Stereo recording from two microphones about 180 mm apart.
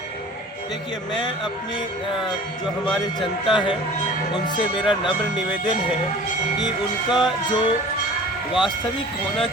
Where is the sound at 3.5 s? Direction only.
25° left (ahead or behind).